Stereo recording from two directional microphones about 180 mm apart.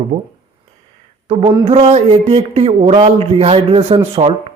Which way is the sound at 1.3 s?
30° right (ahead or behind).